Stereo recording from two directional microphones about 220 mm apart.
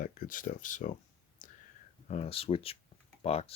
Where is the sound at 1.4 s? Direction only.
35° left (ahead or behind).